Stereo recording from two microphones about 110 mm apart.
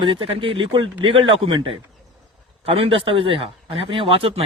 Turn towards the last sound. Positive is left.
turn(degrees=-60)  # may be behind; listen again after turning